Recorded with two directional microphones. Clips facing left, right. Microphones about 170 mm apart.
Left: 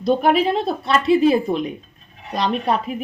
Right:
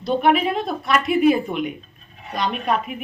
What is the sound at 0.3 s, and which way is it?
Speech, 30° left (ahead or behind).